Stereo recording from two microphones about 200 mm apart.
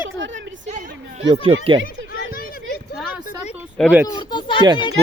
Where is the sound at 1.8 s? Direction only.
45° left (ahead or behind).